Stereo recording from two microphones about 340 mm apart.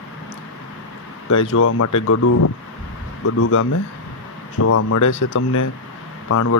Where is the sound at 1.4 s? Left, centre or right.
Left.